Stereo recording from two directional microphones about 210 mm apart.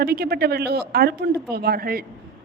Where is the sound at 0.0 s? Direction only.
50° right (ahead or behind).